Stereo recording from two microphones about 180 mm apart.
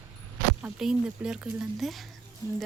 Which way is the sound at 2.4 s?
20° left (ahead or behind).